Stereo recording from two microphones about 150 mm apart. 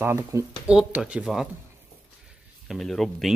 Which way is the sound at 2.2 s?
Centre (ahead or behind).